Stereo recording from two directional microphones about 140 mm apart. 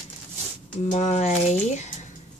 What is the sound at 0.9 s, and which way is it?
Speech, 55° left (ahead or behind).